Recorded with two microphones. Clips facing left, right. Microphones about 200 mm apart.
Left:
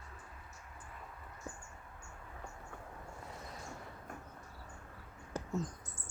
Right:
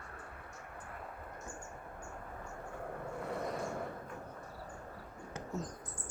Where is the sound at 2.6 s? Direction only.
60° right (ahead or behind).